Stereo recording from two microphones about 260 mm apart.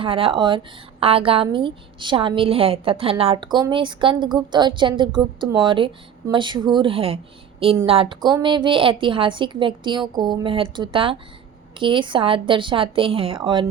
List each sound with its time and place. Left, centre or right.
0.0 s a woman's voice: centre